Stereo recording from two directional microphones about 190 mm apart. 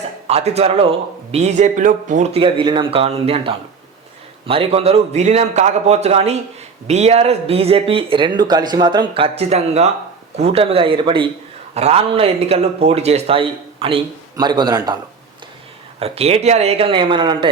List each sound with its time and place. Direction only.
0.3 s speech: 35° right (ahead or behind)
16.0 s speech: 30° right (ahead or behind)